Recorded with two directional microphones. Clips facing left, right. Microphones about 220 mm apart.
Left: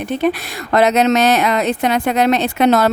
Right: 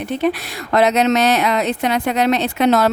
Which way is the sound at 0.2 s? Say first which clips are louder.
Left 1 dB; 50° left (ahead or behind).